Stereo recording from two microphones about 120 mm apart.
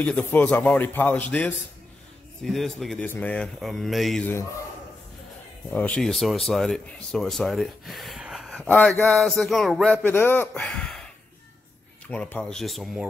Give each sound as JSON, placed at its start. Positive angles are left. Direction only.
{"t": 0.0, "sound": "a man's voice", "side_deg": 15}
{"t": 2.4, "sound": "speech", "side_deg": 0}
{"t": 3.0, "sound": "a man's voice", "side_deg": 10}
{"t": 3.6, "sound": "speech", "side_deg": 0}
{"t": 4.2, "sound": "a man's voice", "side_deg": 15}
{"t": 5.7, "sound": "speech", "side_deg": 10}
{"t": 10.0, "sound": "a man's voice", "side_deg": 15}
{"t": 10.6, "sound": "speech", "side_deg": 5}
{"t": 12.1, "sound": "speech", "side_deg": 10}